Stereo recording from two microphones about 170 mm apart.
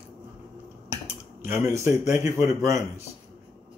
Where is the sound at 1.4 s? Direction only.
15° right (ahead or behind).